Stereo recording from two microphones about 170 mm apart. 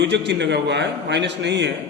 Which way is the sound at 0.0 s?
90° right.